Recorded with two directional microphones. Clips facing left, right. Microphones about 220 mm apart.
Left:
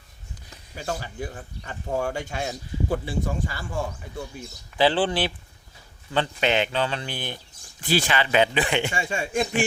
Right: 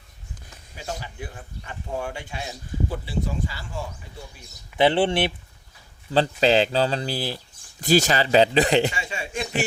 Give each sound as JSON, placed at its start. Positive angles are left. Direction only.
{"t": 0.8, "sound": "speech", "side_deg": 50}
{"t": 4.8, "sound": "speech", "side_deg": -25}
{"t": 8.9, "sound": "speech", "side_deg": 45}